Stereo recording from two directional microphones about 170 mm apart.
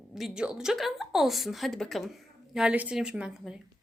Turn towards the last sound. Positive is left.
turn(degrees=-5)  # may be behind; listen again after turning